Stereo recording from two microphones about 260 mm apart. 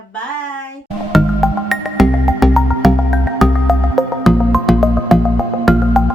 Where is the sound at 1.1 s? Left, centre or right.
Centre.